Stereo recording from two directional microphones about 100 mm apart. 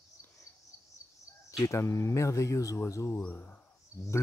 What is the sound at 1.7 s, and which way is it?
Speech, 25° left (ahead or behind).